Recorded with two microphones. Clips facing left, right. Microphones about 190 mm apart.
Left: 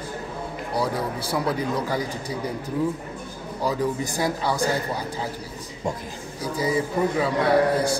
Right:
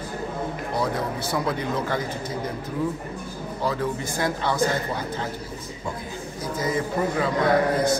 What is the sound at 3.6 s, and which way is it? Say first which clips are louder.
A man's voice: left 2 dB; 15° left (ahead or behind).